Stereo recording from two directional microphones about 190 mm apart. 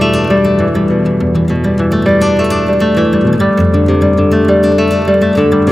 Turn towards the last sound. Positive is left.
turn(degrees=0)  # may be behind; listen again after turning